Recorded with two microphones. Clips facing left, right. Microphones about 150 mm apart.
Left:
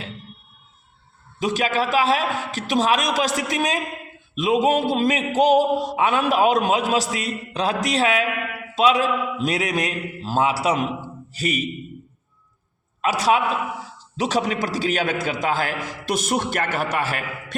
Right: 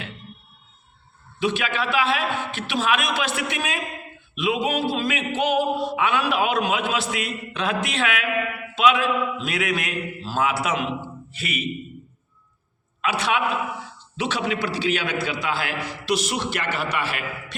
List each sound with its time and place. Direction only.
1.4 s a man's voice: 40° left (ahead or behind)
13.0 s a man's voice: 40° left (ahead or behind)